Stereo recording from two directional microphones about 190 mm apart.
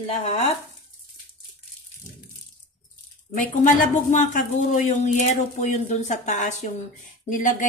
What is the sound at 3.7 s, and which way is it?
Speech, 40° left (ahead or behind).